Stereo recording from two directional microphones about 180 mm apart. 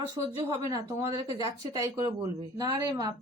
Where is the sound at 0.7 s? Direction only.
20° right (ahead or behind).